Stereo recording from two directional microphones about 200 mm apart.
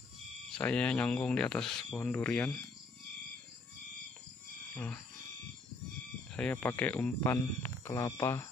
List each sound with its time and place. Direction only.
0.5 s speech: 5° left (ahead or behind)
4.7 s speech: 5° left (ahead or behind)
6.3 s speech: 10° left (ahead or behind)